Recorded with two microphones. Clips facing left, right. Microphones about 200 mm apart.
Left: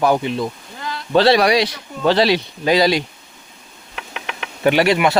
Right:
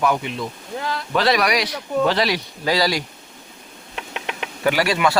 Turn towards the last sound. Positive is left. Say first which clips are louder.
# left 4 dB
turn(degrees=20)  # may be behind; listen again after turning